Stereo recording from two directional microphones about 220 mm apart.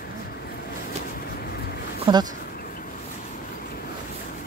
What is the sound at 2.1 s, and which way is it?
Speech, 25° right (ahead or behind).